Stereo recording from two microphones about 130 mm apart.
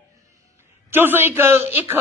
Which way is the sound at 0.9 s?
15° right (ahead or behind).